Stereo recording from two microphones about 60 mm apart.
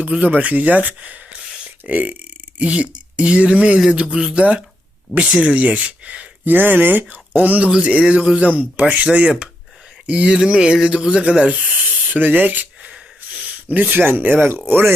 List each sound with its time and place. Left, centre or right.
0.0 s speech: right
1.6 s a sound: right
2.6 s speech: right
6.4 s speech: right
10.3 s a sound: centre
10.8 s speech: centre; by 14.9 s right